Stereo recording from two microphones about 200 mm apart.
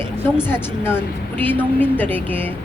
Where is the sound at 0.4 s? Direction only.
10° left (ahead or behind).